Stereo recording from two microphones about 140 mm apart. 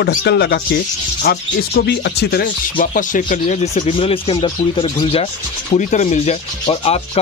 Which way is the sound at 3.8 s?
40° left (ahead or behind).